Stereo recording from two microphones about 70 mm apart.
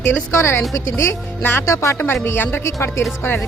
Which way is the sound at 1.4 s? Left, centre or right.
Left.